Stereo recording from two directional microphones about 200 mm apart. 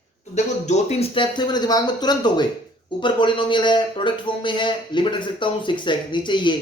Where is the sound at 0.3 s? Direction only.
35° left (ahead or behind).